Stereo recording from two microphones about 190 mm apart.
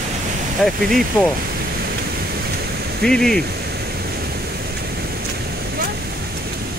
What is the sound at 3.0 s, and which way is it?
Speech, 5° left (ahead or behind).